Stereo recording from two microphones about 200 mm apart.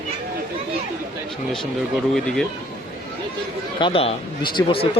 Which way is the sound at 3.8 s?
25° left (ahead or behind).